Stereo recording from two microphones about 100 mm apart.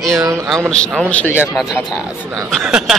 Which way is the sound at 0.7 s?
5° left (ahead or behind).